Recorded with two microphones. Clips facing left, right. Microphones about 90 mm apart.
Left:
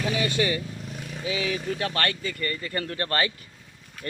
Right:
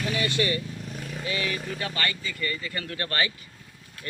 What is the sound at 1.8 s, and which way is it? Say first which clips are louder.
Speech: left 2 dB; 65° left (ahead or behind).